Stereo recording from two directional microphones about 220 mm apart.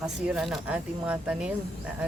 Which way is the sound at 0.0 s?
Centre (ahead or behind).